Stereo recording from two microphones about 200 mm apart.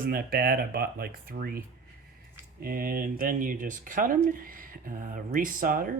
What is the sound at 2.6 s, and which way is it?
Speech, 45° right (ahead or behind).